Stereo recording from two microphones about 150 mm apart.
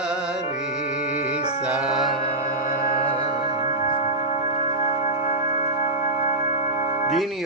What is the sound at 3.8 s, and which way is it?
Music, 60° left (ahead or behind).